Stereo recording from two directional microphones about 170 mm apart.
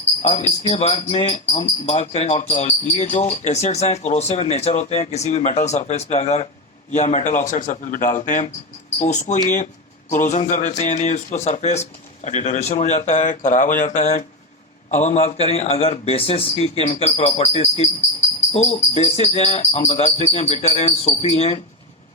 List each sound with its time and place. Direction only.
0.2 s speech: 40° left (ahead or behind)